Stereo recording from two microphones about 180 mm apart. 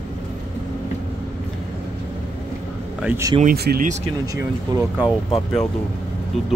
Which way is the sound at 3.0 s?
15° right (ahead or behind).